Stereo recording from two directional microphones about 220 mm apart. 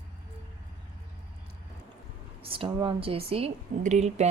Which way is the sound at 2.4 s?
25° right (ahead or behind).